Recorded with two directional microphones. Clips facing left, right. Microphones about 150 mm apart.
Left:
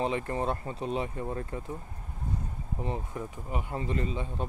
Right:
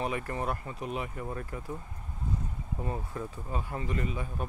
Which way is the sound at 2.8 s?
20° left (ahead or behind).